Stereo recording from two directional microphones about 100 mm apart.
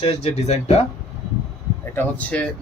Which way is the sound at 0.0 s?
90° left.